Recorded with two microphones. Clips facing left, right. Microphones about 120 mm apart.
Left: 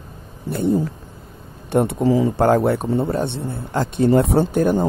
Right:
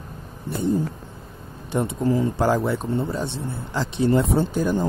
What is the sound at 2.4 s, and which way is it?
Speech, 60° left (ahead or behind).